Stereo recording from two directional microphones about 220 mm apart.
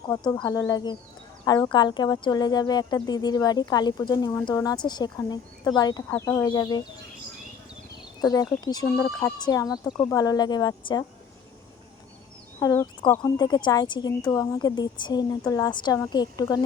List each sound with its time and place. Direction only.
0.4 s speech: 15° left (ahead or behind)
8.2 s speech: 15° left (ahead or behind)
12.5 s speech: 15° left (ahead or behind)